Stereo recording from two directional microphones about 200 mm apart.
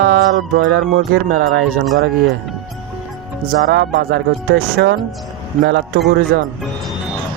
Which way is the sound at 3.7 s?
55° right (ahead or behind).